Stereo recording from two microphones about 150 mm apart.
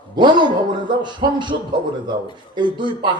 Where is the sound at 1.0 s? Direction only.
30° right (ahead or behind).